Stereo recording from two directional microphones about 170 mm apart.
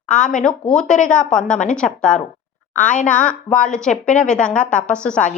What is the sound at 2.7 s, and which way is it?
Speech, 45° left (ahead or behind).